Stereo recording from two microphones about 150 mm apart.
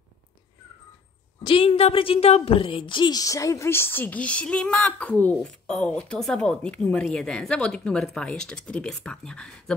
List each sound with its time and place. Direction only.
1.4 s a woman's voice: 40° left (ahead or behind); by 9.8 s 5° left (ahead or behind)